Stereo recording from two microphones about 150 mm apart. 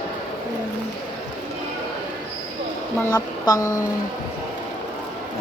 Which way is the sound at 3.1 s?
25° left (ahead or behind).